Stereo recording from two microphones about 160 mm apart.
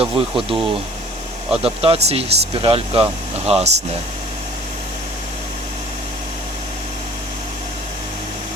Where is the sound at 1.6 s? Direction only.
40° right (ahead or behind).